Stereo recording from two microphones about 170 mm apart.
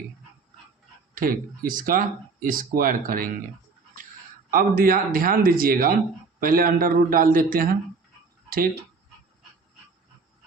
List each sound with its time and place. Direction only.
1.1 s speech: 55° right (ahead or behind)
4.5 s speech: 55° right (ahead or behind)